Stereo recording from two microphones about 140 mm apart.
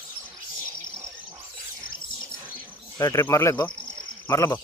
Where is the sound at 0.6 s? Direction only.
20° right (ahead or behind).